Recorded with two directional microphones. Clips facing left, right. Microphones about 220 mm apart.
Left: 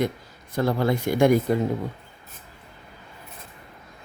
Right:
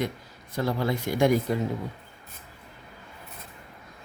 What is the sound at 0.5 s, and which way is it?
Speech, 55° left (ahead or behind).